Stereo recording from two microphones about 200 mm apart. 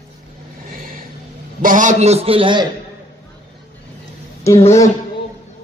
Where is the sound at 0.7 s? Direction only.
45° right (ahead or behind).